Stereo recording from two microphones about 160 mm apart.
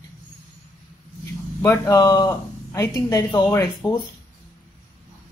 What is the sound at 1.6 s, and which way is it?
Speech, 15° left (ahead or behind).